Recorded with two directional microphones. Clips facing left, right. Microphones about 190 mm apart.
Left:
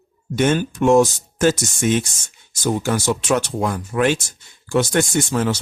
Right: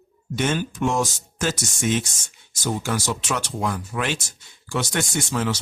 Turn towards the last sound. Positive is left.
turn(degrees=45)  # may be behind; listen again after turning